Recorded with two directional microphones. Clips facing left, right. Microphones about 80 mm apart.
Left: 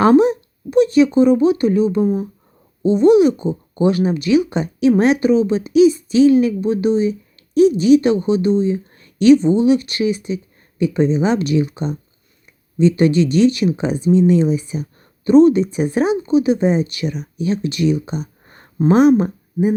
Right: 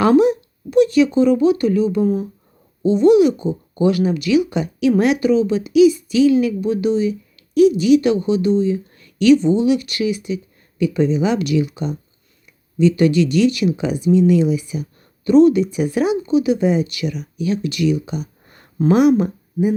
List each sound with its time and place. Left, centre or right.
0.0 s speech: left